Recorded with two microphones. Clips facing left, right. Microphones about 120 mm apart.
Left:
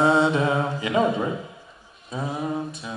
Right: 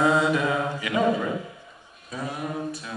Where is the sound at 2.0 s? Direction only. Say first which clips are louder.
Left 3 dB; 25° left (ahead or behind).